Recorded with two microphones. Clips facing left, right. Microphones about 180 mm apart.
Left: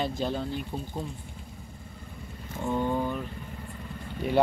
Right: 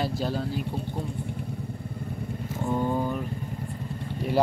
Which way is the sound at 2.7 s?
10° right (ahead or behind).